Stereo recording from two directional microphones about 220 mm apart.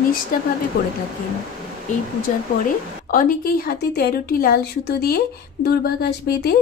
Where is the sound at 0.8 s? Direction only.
40° left (ahead or behind).